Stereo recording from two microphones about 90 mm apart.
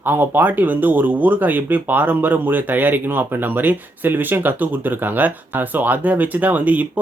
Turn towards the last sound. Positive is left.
turn(degrees=-15)  # may be behind; listen again after turning